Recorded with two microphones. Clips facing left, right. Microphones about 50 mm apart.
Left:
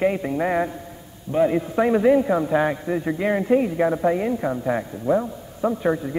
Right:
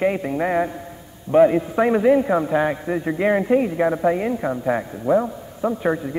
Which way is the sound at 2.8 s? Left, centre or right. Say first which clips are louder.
Right 2 dB; centre.